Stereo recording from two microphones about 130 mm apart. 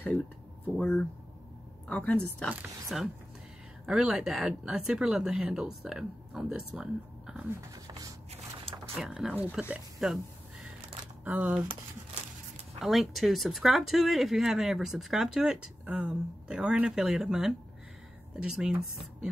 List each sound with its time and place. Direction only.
0.7 s a woman's voice: 10° left (ahead or behind); by 7.5 s 5° right (ahead or behind)
7.7 s a sound: 30° right (ahead or behind)
9.0 s speech: 5° right (ahead or behind)
11.2 s speech: 10° right (ahead or behind)
12.8 s speech: centre (ahead or behind)